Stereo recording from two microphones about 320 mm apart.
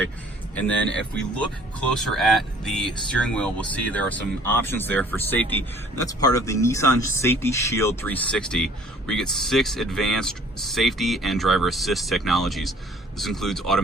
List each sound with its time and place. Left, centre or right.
0.5 s speech: centre